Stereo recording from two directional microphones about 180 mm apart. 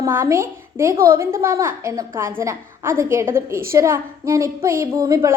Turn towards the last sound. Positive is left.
turn(degrees=-20)  # may be behind; listen again after turning